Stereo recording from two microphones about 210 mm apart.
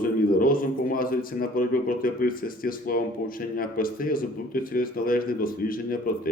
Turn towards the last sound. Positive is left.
turn(degrees=40)  # may be behind; listen again after turning